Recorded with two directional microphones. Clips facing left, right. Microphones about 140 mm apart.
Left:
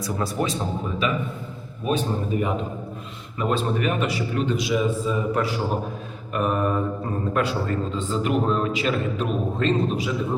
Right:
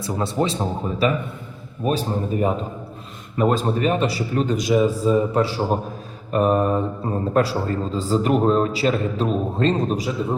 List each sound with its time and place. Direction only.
0.0 s a man's voice: 25° right (ahead or behind)